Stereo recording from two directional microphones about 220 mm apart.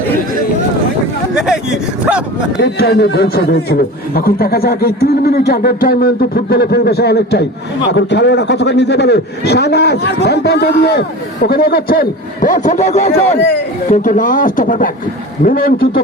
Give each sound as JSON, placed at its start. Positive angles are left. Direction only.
{"t": 1.4, "sound": "speech", "side_deg": 0}
{"t": 2.6, "sound": "a man's voice", "side_deg": 50}